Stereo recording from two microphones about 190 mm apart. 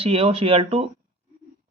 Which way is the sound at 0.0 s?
30° right (ahead or behind).